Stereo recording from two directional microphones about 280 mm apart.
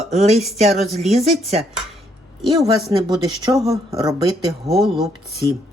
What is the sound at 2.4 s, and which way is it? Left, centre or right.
A woman's voice, centre.